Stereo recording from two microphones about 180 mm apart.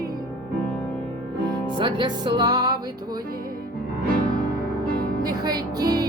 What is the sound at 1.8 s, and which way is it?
Music, 25° right (ahead or behind).